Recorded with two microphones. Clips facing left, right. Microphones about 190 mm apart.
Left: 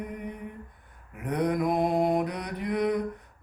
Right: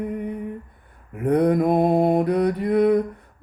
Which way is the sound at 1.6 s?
25° right (ahead or behind).